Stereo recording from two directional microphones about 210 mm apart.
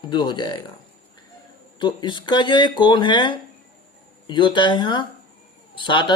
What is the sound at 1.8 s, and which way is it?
Speech, 20° left (ahead or behind).